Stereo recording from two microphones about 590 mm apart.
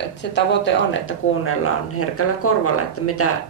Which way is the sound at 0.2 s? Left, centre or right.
Centre.